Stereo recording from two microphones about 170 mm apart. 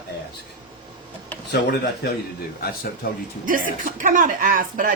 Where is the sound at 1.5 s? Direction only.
70° left (ahead or behind).